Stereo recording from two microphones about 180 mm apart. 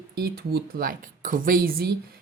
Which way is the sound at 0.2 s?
60° right (ahead or behind).